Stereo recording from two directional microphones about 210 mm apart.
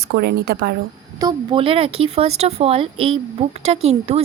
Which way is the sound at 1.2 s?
20° right (ahead or behind).